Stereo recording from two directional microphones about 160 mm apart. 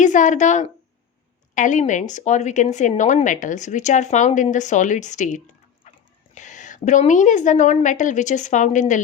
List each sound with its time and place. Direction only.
0.0 s a woman's voice: 50° left (ahead or behind)
5.8 s a sound: 45° left (ahead or behind)
6.3 s a woman's voice: 50° left (ahead or behind)